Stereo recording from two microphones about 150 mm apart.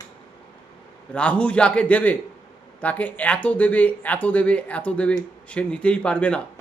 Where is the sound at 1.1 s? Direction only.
10° left (ahead or behind).